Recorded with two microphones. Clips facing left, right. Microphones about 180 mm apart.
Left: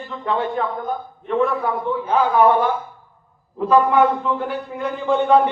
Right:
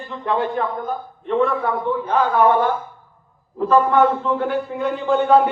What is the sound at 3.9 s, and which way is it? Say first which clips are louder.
Speech: even; 10° left (ahead or behind).